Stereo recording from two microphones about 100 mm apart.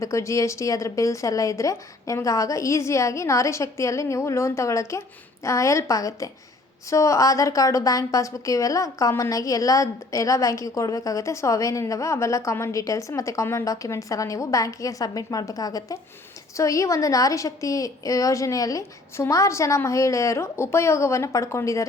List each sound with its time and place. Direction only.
0.0 s a woman's voice: 30° left (ahead or behind)